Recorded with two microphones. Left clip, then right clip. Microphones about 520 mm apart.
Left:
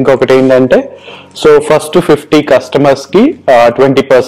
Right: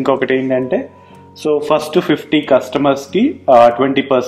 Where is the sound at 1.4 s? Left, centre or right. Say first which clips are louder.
Left 9 dB; left.